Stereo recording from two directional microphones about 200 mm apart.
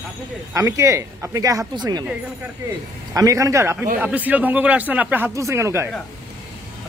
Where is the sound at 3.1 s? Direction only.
15° right (ahead or behind).